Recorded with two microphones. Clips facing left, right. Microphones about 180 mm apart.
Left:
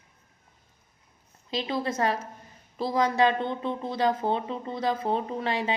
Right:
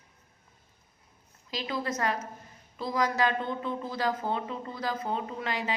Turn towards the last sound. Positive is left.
turn(degrees=30)  # may be behind; listen again after turning